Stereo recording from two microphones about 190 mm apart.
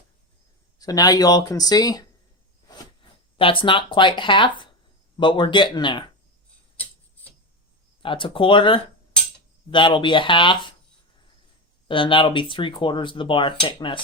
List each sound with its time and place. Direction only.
0.8 s speech: 20° left (ahead or behind)
8.0 s speech: 25° left (ahead or behind)
11.9 s speech: 25° left (ahead or behind)